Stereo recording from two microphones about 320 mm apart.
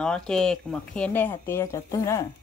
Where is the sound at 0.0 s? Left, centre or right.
Centre.